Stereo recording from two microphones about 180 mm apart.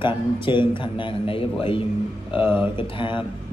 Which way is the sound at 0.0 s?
25° left (ahead or behind).